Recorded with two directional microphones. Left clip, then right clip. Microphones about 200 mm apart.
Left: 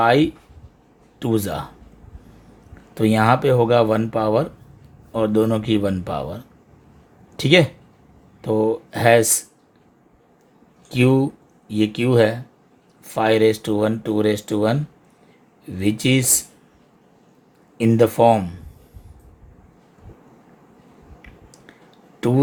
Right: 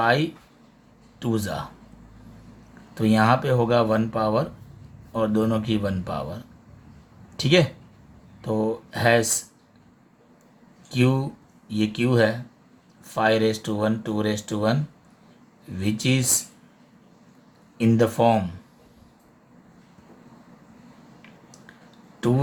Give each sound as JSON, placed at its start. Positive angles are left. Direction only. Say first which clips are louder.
{"t": 0.0, "sound": "speech", "louder": "left 5 dB", "side_deg": 35}
{"t": 2.9, "sound": "speech", "louder": "left 3 dB", "side_deg": 35}
{"t": 10.8, "sound": "speech", "louder": "left 6 dB", "side_deg": 30}
{"t": 15.8, "sound": "speech", "louder": "left 5 dB", "side_deg": 30}
{"t": 17.7, "sound": "speech", "louder": "left 5 dB", "side_deg": 30}
{"t": 22.2, "sound": "speech", "louder": "left 3 dB", "side_deg": 30}